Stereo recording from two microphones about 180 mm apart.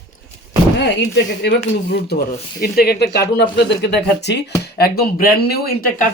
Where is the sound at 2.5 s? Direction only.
60° left (ahead or behind).